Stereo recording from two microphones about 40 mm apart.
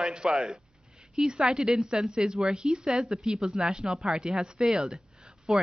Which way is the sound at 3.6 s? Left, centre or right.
Right.